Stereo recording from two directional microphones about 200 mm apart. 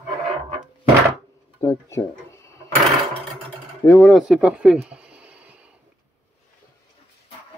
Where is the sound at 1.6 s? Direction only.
15° left (ahead or behind).